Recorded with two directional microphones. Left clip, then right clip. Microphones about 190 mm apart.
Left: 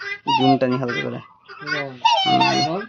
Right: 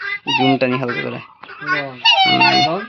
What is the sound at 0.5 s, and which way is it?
Speech, 10° left (ahead or behind).